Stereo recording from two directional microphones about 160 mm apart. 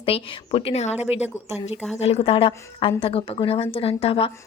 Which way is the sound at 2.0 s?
40° left (ahead or behind).